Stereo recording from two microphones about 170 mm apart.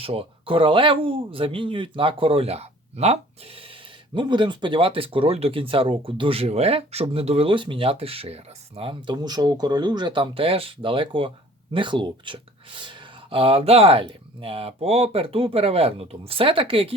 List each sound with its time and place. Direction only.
0.0 s speech: 35° right (ahead or behind)